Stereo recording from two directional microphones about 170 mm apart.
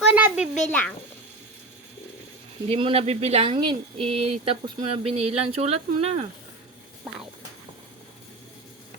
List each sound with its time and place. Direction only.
0.1 s a sound: 10° right (ahead or behind)
0.7 s a child's voice: 10° left (ahead or behind)
2.6 s speech: 35° right (ahead or behind)